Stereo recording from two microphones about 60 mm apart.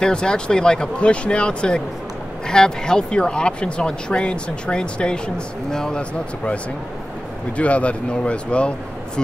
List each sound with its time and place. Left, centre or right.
0.0 s speech: centre